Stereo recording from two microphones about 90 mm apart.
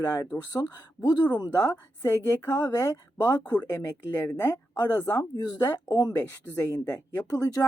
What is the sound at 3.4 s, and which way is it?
Speech, 15° left (ahead or behind).